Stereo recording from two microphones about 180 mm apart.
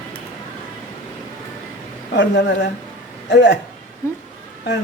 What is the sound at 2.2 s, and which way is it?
Speech, 75° left (ahead or behind).